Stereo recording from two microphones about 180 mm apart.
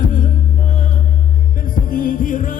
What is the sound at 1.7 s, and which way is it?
Music, 50° left (ahead or behind).